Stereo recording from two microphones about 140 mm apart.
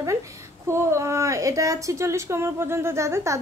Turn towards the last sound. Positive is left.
turn(degrees=-20)  # may be behind; listen again after turning